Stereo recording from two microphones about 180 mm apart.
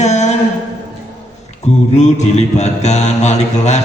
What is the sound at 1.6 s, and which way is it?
Mantra, 40° left (ahead or behind).